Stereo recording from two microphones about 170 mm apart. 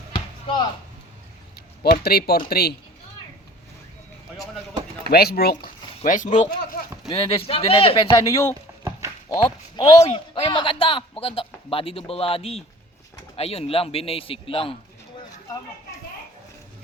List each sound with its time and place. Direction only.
1.8 s speech: 65° left (ahead or behind)
5.0 s speech: 65° left (ahead or behind)
6.0 s speech: 45° left (ahead or behind)
7.1 s a man's voice: 30° left (ahead or behind)